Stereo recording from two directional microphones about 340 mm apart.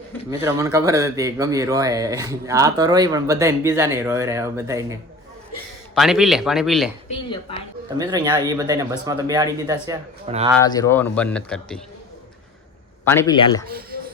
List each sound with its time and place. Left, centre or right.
0.3 s speech: centre
7.9 s speech: centre
10.6 s speech: centre
13.1 s speech: centre